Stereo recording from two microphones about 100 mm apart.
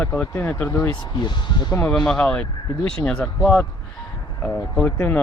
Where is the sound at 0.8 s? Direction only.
45° left (ahead or behind).